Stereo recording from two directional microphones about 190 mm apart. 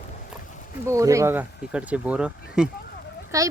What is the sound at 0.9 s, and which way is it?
Speech, 15° right (ahead or behind).